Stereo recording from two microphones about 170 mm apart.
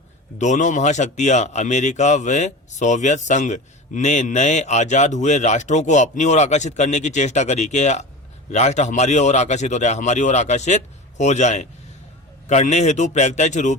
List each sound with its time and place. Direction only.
0.3 s speech: 45° left (ahead or behind)